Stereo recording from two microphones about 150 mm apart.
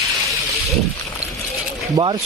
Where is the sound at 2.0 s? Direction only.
25° right (ahead or behind).